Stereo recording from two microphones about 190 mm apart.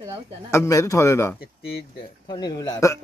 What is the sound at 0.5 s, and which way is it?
Speech, 15° left (ahead or behind).